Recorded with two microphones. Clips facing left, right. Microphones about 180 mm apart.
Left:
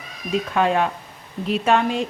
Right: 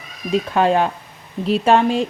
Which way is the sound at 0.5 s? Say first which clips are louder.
Right 3 dB; 35° right (ahead or behind).